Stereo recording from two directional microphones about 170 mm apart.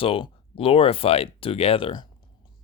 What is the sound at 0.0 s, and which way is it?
Speech, 30° left (ahead or behind).